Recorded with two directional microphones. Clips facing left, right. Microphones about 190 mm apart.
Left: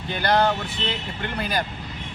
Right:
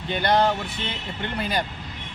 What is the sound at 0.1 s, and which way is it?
Speech, 20° right (ahead or behind).